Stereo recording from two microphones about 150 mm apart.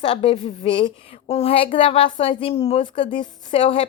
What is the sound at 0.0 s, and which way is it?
A woman's voice, 35° left (ahead or behind).